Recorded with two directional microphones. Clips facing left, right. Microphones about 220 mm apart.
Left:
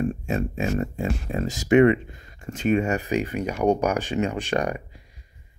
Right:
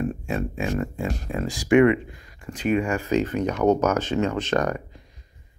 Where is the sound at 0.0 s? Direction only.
25° left (ahead or behind).